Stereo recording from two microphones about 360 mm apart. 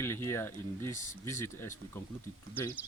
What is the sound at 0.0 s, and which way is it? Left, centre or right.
Speech, centre.